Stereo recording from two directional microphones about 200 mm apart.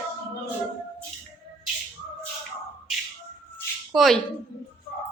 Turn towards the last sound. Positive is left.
turn(degrees=0)  # may be behind; listen again after turning